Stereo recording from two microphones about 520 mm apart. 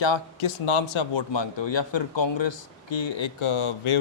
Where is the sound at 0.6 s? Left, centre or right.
Left.